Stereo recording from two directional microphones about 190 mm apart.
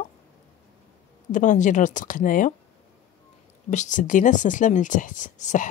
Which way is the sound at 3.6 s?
40° left (ahead or behind).